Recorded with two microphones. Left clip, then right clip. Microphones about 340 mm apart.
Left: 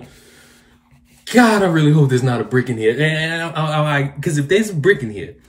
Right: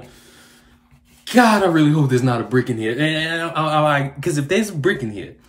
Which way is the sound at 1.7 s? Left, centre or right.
Right.